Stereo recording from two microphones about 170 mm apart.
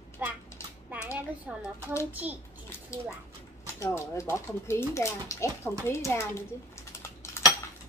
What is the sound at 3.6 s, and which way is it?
Speech, 15° left (ahead or behind).